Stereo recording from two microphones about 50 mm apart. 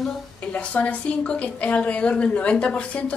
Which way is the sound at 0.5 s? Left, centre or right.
Left.